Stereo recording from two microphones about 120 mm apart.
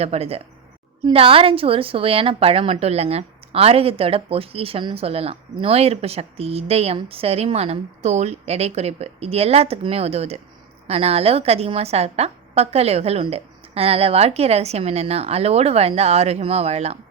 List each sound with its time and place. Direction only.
0.0 s a woman's voice: 60° right (ahead or behind)